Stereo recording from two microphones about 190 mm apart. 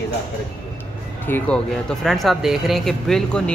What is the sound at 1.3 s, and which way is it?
Speech, 5° left (ahead or behind).